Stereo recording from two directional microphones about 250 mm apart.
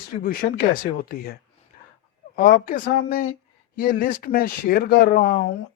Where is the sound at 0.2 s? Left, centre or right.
Left.